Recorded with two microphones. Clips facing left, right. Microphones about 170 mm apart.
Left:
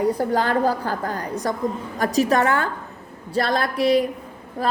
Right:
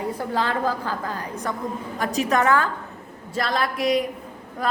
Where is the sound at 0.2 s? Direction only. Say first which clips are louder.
Left 4 dB; 35° left (ahead or behind).